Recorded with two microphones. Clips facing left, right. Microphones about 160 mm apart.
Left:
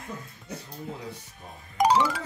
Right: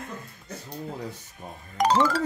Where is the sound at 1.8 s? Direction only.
10° left (ahead or behind).